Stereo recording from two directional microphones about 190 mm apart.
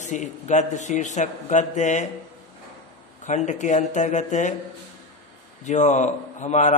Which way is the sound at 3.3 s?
40° left (ahead or behind).